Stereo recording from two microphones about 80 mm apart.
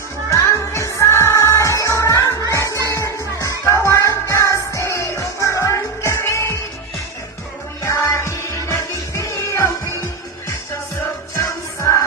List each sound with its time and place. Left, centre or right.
0.3 s music: left
7.8 s music: left
11.4 s music: left